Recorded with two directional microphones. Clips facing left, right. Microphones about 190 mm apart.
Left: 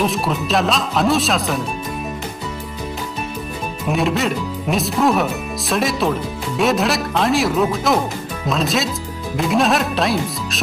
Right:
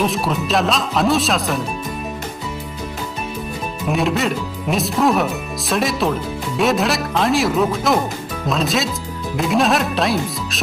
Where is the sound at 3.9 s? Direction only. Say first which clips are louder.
Even; centre (ahead or behind).